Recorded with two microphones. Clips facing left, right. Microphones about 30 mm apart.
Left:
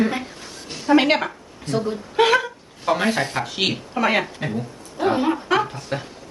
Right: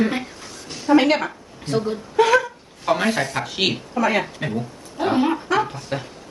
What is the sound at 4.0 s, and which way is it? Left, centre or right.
Speech, left.